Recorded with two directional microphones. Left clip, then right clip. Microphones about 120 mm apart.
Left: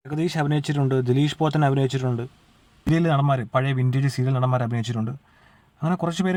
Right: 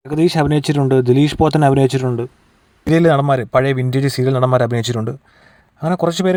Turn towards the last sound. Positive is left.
turn(degrees=-45)  # may be behind; listen again after turning